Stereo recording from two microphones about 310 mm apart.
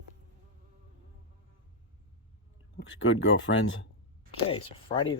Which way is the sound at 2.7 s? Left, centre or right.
Left.